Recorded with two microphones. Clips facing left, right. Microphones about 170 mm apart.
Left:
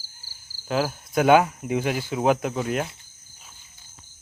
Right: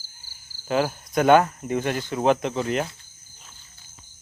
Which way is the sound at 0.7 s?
Centre (ahead or behind).